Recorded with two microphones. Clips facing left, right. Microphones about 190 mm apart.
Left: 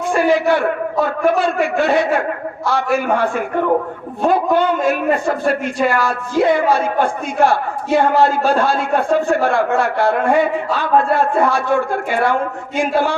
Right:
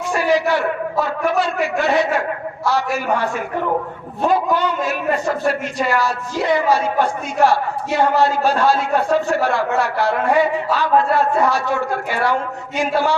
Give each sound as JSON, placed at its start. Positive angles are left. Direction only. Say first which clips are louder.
{"t": 0.0, "sound": "a man's voice", "louder": "left 3 dB", "side_deg": 55}